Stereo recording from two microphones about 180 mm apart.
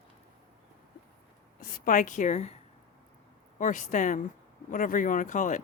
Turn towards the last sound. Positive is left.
turn(degrees=45)  # may be behind; listen again after turning